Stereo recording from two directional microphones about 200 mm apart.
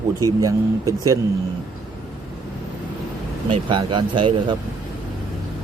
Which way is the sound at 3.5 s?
25° right (ahead or behind).